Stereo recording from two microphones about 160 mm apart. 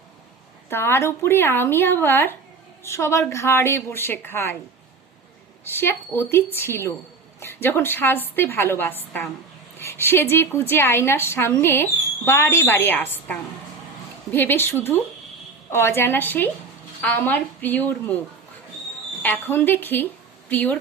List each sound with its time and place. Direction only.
0.7 s a woman's voice: 15° left (ahead or behind)
5.6 s a woman's voice: 15° left (ahead or behind)
19.2 s a woman's voice: 10° left (ahead or behind)